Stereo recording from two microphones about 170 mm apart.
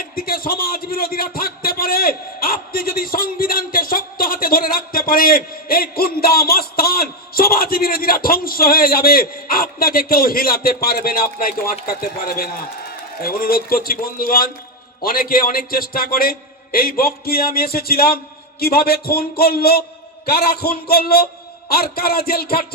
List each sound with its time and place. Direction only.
0.0 s a man's voice: 60° left (ahead or behind)